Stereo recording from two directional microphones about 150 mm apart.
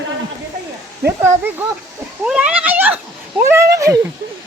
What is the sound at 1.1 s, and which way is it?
Speech, 15° right (ahead or behind).